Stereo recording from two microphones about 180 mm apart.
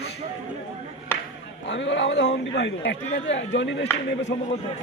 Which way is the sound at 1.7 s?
85° left.